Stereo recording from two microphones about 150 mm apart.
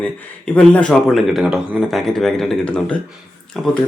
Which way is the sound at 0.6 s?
10° left (ahead or behind).